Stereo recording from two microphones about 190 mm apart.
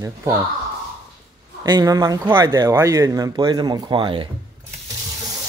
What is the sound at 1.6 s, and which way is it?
Speech, 20° right (ahead or behind).